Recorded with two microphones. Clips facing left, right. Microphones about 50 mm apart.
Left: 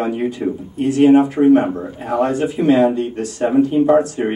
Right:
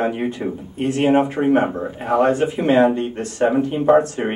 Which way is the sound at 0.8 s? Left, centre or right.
Right.